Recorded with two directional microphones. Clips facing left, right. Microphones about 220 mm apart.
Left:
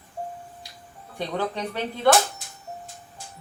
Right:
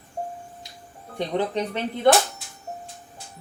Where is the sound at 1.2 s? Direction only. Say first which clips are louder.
Right 3 dB; 20° right (ahead or behind).